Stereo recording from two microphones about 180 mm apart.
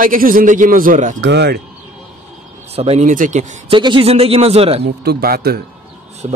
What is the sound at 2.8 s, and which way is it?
Speech, 35° right (ahead or behind).